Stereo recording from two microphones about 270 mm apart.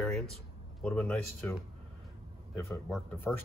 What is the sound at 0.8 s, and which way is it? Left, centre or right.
Speech, centre.